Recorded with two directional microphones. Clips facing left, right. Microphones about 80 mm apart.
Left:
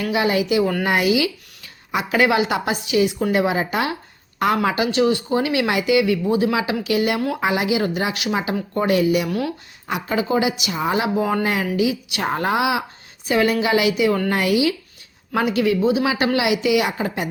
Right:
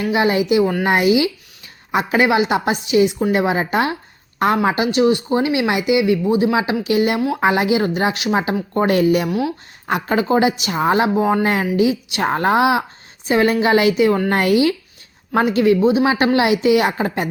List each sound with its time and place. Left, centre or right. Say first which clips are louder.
0.0 s speech: right 3 dB; right
0.9 s a woman's voice: right 3 dB; right
2.2 s a woman's voice: right 1 dB; right
11.1 s speech: right 4 dB; right
11.4 s a woman's voice: right 4 dB; right